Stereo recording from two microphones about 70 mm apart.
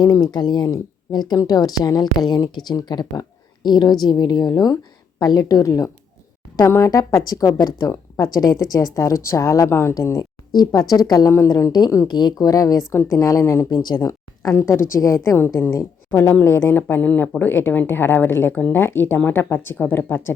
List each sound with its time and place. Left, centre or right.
0.0 s speech: left
1.4 s speech: left
5.6 s a woman's voice: left
6.7 s a woman's voice: left
9.6 s a woman's voice: left
10.5 s a woman's voice: left
12.0 s a woman's voice: left
12.9 s a woman's voice: left
13.7 s speech: left